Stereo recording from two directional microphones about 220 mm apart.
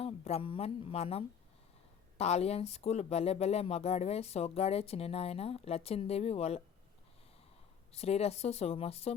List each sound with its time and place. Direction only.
0.0 s a woman's voice: 25° left (ahead or behind)
7.9 s speech: 30° left (ahead or behind)